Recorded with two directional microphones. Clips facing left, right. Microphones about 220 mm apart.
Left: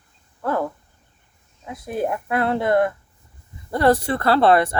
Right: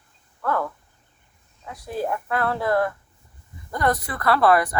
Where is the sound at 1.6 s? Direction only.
20° left (ahead or behind).